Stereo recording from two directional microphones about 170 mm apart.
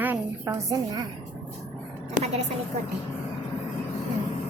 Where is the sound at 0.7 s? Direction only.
20° right (ahead or behind).